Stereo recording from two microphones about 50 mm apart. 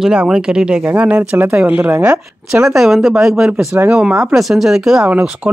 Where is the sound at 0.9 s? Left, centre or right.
Right.